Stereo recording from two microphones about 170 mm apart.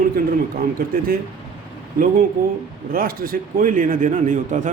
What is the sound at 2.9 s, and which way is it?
A man's voice, 60° right (ahead or behind).